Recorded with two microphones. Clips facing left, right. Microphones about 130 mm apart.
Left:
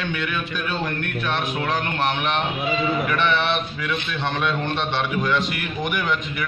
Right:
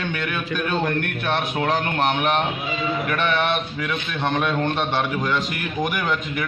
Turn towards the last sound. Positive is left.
turn(degrees=-45)  # may be behind; listen again after turning